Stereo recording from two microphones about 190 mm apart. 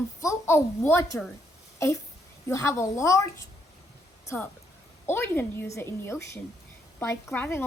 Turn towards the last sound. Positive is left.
turn(degrees=10)  # may be behind; listen again after turning